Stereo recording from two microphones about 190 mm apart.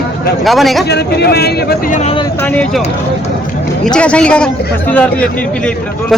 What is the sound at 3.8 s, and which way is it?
A man's voice, 5° left (ahead or behind).